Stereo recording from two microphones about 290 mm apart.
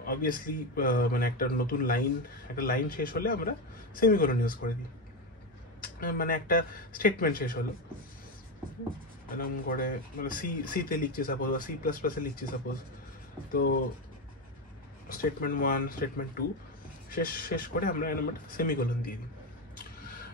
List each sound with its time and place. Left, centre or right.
0.0 s a man's voice: left
5.8 s speech: left
9.3 s speech: left
13.5 s speech: left
15.0 s speech: left